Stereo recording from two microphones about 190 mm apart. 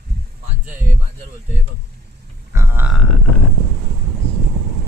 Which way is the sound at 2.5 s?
10° right (ahead or behind).